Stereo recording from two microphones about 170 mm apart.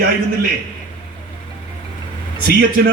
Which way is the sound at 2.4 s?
60° right (ahead or behind).